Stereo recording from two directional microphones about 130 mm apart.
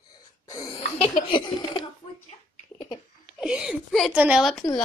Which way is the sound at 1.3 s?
35° left (ahead or behind).